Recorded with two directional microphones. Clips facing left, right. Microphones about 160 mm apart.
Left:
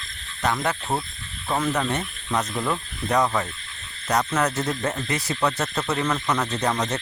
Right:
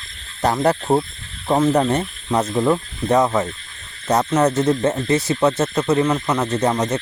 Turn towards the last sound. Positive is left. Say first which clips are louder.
# right 6 dB
turn(degrees=-20)  # may be behind; listen again after turning